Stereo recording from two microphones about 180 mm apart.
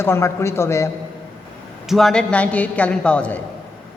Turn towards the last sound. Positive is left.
turn(degrees=5)  # may be behind; listen again after turning